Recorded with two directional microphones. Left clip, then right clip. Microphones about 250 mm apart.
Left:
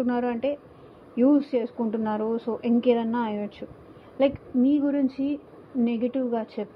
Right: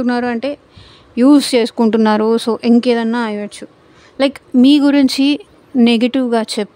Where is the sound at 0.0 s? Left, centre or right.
Right.